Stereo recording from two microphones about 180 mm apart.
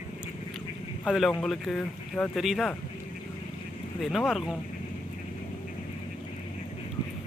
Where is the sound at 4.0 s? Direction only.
Centre (ahead or behind).